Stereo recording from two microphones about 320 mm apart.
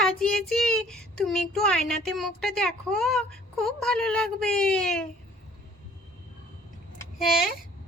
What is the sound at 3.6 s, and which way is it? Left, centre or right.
A woman's voice, centre.